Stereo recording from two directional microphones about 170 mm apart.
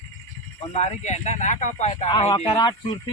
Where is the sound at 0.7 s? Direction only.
40° left (ahead or behind).